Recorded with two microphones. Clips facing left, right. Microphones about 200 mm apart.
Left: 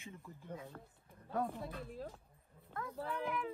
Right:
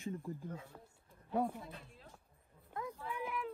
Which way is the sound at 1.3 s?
15° right (ahead or behind).